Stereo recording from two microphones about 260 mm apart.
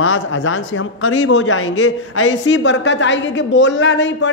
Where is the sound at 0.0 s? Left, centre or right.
Left.